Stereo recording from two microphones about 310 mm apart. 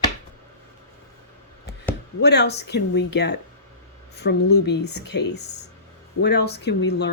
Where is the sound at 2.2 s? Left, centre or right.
Left.